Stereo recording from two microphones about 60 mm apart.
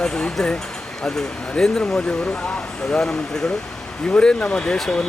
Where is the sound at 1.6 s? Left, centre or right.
Centre.